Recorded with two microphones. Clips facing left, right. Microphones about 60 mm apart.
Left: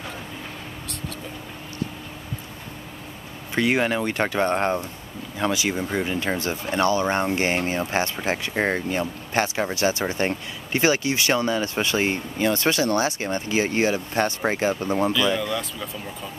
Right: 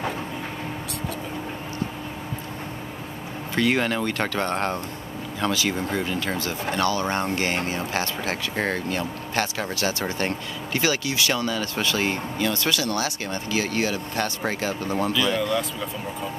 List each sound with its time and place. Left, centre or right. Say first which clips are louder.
3.5 s speech: left 1 dB; centre
15.1 s speech: even; centre